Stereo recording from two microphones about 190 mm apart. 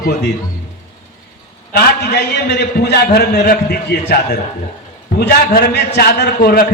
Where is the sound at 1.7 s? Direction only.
60° left (ahead or behind).